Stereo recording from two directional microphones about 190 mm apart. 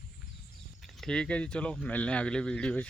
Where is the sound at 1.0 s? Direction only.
5° left (ahead or behind).